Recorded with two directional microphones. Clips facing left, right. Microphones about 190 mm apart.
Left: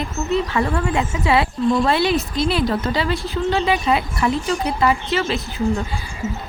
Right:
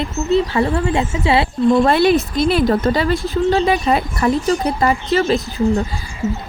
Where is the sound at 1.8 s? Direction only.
50° right (ahead or behind).